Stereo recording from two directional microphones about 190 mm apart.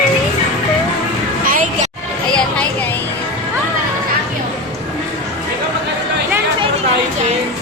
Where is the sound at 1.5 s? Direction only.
45° right (ahead or behind).